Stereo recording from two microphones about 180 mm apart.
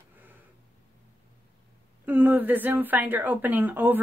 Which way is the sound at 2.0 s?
10° right (ahead or behind).